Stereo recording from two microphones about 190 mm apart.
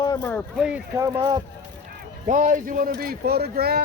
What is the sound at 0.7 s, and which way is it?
Speech, 10° right (ahead or behind).